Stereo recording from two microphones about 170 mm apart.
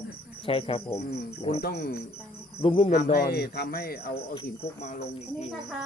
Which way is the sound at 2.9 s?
60° left (ahead or behind).